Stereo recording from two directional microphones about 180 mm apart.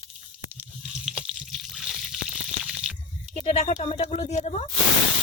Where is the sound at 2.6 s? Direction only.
5° right (ahead or behind).